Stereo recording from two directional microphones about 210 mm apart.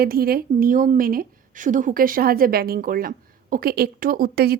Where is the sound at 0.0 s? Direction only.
45° right (ahead or behind).